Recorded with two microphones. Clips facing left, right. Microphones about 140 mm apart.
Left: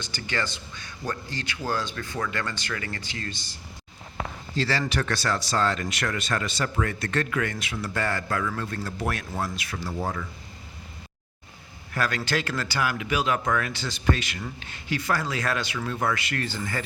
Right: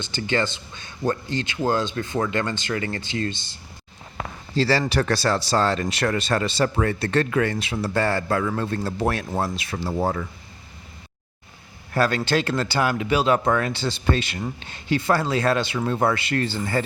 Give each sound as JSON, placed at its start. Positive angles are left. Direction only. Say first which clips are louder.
{"t": 0.0, "sound": "speech", "louder": "right 7 dB", "side_deg": -25}
{"t": 11.9, "sound": "speech", "louder": "right 6 dB", "side_deg": -30}